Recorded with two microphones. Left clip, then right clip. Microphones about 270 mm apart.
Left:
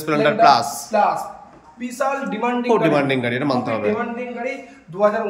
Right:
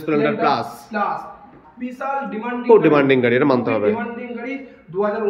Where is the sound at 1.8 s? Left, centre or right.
Left.